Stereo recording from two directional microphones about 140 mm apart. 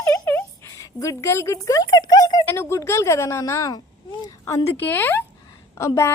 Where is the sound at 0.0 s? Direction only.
25° left (ahead or behind).